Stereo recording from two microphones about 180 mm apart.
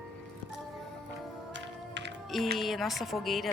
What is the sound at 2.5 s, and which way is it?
Speech, centre (ahead or behind).